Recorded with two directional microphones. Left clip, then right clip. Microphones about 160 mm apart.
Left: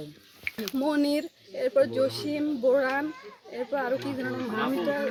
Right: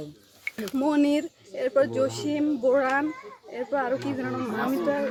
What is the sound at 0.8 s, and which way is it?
Speech, 5° right (ahead or behind).